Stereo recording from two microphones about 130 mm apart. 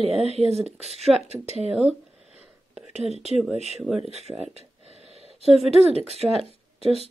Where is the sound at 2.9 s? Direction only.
55° right (ahead or behind).